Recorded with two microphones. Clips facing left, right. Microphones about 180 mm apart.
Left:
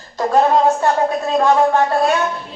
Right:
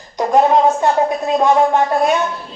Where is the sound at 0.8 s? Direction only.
20° right (ahead or behind).